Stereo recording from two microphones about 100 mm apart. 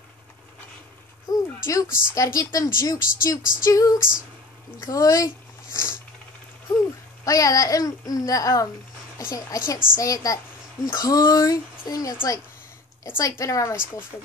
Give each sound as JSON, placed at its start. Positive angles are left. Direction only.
{"t": 1.3, "sound": "speech", "side_deg": 35}
{"t": 7.2, "sound": "speech", "side_deg": 35}